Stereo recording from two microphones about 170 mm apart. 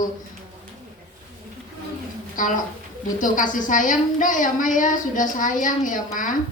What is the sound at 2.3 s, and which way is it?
A woman's voice, 50° left (ahead or behind).